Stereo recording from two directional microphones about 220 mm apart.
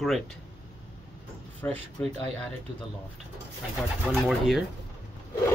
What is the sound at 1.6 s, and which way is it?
Speech, 5° left (ahead or behind).